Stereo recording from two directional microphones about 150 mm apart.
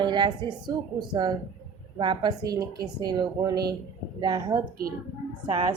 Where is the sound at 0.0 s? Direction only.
30° right (ahead or behind).